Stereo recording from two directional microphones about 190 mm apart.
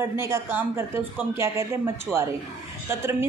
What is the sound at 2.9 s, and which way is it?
Speech, 10° right (ahead or behind).